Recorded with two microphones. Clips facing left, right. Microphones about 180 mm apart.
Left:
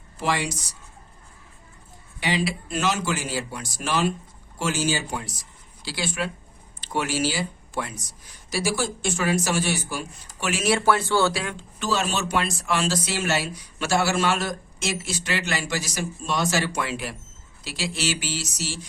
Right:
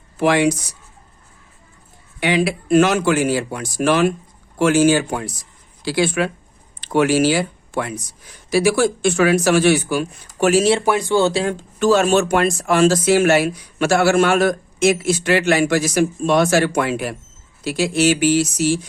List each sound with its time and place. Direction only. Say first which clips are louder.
0.2 s speech: right 11 dB; 60° right (ahead or behind)
2.2 s speech: right 7 dB; 55° right (ahead or behind)
10.4 s speech: right 7 dB; 35° right (ahead or behind)
11.5 s speech: right 11 dB; 50° right (ahead or behind)